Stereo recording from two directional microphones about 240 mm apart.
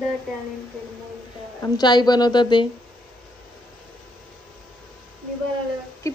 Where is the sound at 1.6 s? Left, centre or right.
Centre.